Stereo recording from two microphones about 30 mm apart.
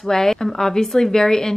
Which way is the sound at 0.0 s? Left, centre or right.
Centre.